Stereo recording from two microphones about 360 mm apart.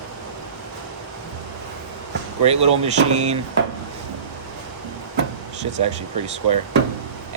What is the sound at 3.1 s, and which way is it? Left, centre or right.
Speech, centre.